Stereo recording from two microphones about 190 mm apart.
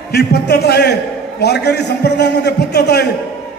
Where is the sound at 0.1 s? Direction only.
60° left (ahead or behind).